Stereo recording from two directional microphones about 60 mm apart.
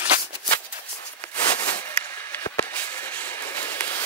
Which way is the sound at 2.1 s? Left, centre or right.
Left.